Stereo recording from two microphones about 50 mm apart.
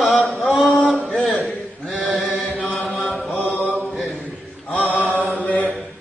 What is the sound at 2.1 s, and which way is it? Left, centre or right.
Chant, centre.